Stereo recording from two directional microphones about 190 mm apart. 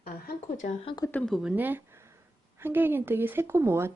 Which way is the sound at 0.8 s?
25° left (ahead or behind).